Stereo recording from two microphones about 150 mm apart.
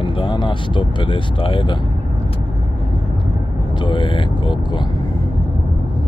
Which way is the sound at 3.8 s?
30° left (ahead or behind).